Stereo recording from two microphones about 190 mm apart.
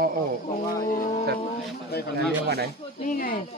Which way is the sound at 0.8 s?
45° left (ahead or behind).